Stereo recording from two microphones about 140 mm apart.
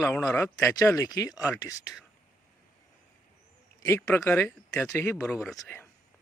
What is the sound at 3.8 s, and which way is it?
Speech, 20° left (ahead or behind).